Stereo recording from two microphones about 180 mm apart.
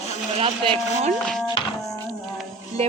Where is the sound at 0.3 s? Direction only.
30° right (ahead or behind).